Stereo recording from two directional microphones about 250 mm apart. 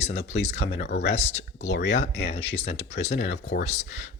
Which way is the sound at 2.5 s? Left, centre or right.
Left.